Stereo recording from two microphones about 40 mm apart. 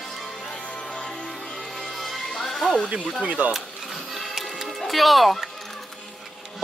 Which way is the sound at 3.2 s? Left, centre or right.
Right.